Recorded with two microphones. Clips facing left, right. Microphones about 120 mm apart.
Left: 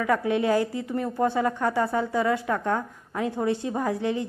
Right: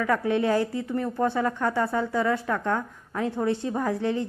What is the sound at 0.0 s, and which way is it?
A woman's voice, 20° left (ahead or behind).